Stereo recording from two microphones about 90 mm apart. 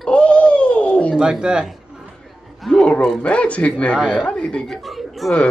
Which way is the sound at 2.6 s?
10° left (ahead or behind).